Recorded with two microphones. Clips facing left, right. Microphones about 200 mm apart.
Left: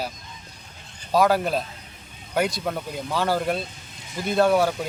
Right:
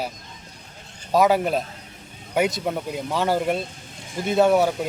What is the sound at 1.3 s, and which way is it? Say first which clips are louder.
Speech: right 2 dB; 15° right (ahead or behind).